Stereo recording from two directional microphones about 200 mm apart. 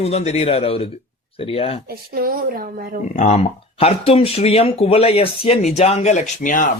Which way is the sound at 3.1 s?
35° left (ahead or behind).